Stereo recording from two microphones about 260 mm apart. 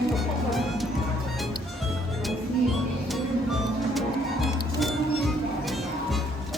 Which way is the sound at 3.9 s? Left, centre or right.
Centre.